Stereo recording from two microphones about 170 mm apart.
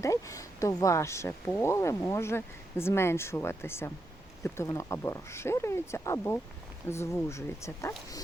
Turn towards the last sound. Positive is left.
turn(degrees=15)  # may be behind; listen again after turning